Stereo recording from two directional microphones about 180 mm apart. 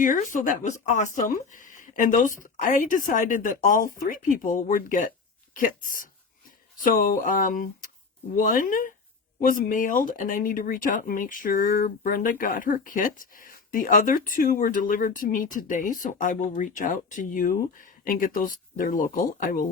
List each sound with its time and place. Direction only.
0.0 s speech: 45° left (ahead or behind)